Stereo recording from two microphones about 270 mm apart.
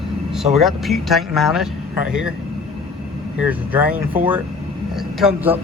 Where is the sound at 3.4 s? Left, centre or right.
Centre.